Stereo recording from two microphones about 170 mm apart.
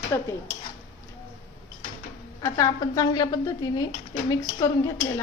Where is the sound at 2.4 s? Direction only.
20° left (ahead or behind).